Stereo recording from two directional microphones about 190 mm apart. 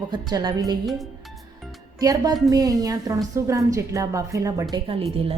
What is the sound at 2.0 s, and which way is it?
A woman's voice, 20° right (ahead or behind).